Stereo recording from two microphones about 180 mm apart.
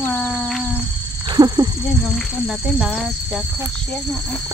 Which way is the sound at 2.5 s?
Centre (ahead or behind).